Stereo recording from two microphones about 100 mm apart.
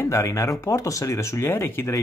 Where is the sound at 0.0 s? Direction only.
30° left (ahead or behind).